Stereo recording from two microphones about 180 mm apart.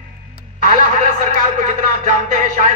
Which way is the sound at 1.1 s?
45° right (ahead or behind).